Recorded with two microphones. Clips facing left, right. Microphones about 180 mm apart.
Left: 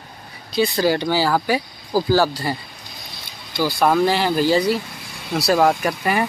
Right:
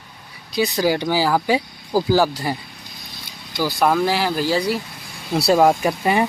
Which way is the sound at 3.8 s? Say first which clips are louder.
Left 1 dB; centre (ahead or behind).